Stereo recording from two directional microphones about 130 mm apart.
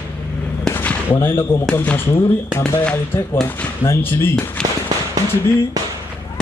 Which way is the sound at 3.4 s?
20° left (ahead or behind).